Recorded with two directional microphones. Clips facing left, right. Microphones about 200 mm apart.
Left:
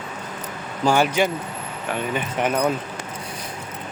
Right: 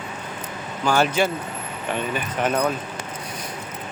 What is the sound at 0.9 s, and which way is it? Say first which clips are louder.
Speech: right 1 dB; 15° left (ahead or behind).